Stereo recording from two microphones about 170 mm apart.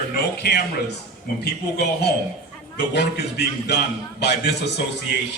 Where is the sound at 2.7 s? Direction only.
85° left.